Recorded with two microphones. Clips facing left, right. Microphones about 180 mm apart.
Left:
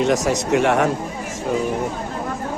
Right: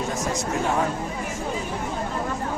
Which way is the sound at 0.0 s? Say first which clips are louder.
Left 8 dB; 80° left.